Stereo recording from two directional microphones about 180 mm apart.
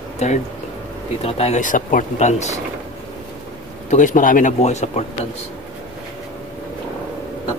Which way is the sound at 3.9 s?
45° left (ahead or behind).